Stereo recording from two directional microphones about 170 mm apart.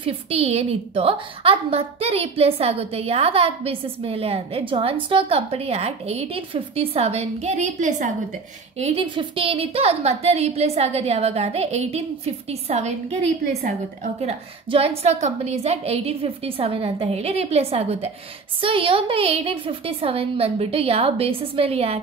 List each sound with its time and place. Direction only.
0.0 s a woman's voice: 35° right (ahead or behind)